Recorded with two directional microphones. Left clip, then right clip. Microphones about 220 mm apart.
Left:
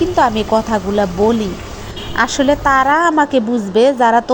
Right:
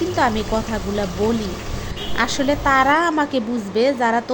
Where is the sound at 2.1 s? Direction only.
15° left (ahead or behind).